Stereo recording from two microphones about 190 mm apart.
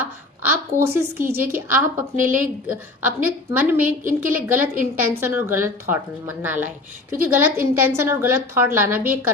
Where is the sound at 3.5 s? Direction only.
10° right (ahead or behind).